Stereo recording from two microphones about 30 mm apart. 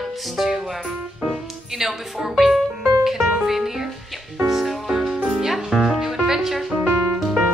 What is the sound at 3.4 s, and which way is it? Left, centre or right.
Speech, centre.